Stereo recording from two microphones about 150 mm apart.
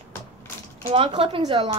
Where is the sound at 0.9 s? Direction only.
35° right (ahead or behind).